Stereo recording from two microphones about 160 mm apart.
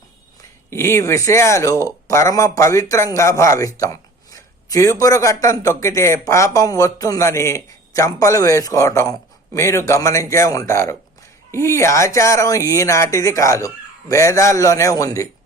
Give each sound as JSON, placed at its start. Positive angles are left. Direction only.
{"t": 0.7, "sound": "speech", "side_deg": 15}